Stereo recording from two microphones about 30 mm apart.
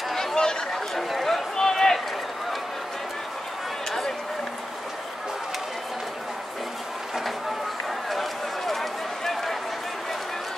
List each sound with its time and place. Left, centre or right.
0.1 s chatter: centre
0.4 s chatter: left
1.2 s run: centre
8.1 s run: centre